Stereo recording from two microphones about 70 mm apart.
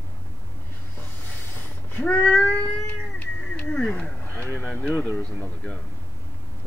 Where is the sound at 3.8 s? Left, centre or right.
Left.